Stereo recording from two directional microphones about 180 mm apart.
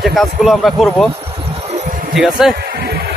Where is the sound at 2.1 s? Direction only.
Centre (ahead or behind).